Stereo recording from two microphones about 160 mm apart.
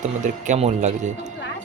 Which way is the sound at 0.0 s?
50° right (ahead or behind).